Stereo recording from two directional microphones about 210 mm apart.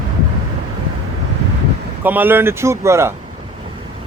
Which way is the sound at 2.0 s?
10° right (ahead or behind).